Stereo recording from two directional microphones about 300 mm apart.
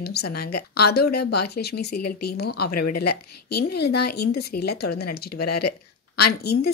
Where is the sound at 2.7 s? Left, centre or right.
Left.